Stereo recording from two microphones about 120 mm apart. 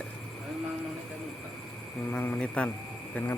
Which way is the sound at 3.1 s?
20° left (ahead or behind).